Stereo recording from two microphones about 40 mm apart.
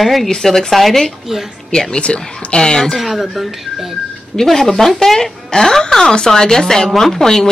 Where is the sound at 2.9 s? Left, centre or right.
Centre.